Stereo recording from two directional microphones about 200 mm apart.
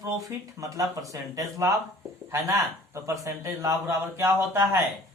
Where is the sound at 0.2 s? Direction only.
15° right (ahead or behind).